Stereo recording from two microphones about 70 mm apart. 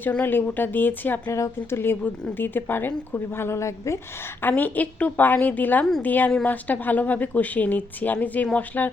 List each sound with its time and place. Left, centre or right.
0.1 s a woman's voice: left
1.3 s speech: left
4.4 s a woman's voice: left